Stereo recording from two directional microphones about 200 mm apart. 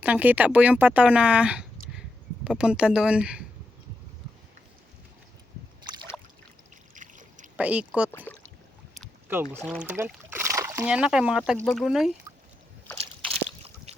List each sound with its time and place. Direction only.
0.0 s speech: 10° right (ahead or behind)
6.9 s a sound: 40° right (ahead or behind)
7.5 s speech: 5° right (ahead or behind)
8.1 s speech: 10° left (ahead or behind)
9.6 s speech: 5° left (ahead or behind)
9.8 s speech: 10° right (ahead or behind)
12.9 s slosh: 5° left (ahead or behind)